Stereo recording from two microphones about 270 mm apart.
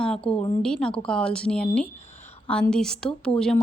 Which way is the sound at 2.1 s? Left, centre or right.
Left.